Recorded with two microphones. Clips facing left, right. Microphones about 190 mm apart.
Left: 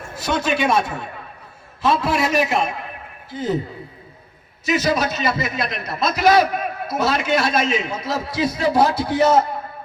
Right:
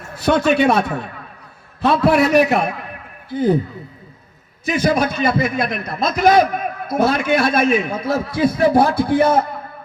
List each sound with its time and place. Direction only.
0.2 s a man's voice: 60° right (ahead or behind)
4.6 s a man's voice: 55° right (ahead or behind)